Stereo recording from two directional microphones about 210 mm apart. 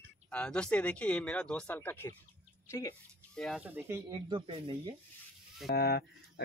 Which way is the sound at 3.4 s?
Centre (ahead or behind).